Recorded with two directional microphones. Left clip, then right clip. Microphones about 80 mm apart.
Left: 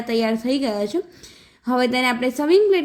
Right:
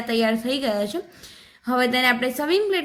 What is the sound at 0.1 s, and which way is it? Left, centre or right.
A woman's voice, left.